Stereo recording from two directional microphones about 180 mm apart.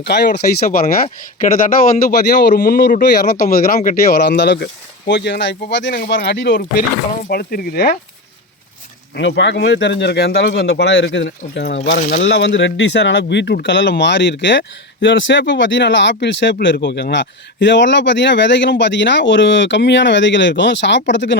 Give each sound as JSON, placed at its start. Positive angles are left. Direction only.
{"t": 0.0, "sound": "speech", "side_deg": 70}
{"t": 0.3, "sound": "speech", "side_deg": 55}
{"t": 4.1, "sound": "speech", "side_deg": 65}
{"t": 9.1, "sound": "speech", "side_deg": 75}